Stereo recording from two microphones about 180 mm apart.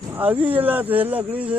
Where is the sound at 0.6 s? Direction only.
10° right (ahead or behind).